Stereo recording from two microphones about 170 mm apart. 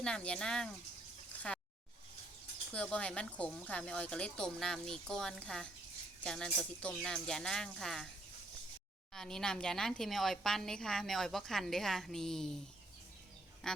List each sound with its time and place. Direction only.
0.0 s a woman's voice: 5° left (ahead or behind)
2.7 s a woman's voice: 5° left (ahead or behind)
9.1 s a woman's voice: 5° left (ahead or behind)
13.6 s a woman's voice: 5° left (ahead or behind)